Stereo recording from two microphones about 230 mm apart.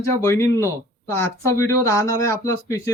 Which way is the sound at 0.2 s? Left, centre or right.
Centre.